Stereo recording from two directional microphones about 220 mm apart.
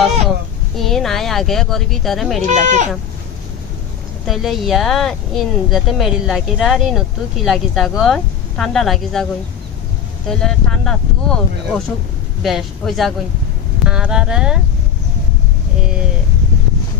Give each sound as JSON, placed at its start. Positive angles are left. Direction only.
{"t": 0.7, "sound": "speech", "side_deg": 0}
{"t": 2.4, "sound": "speech", "side_deg": -35}
{"t": 4.3, "sound": "speech", "side_deg": 0}
{"t": 12.4, "sound": "speech", "side_deg": 0}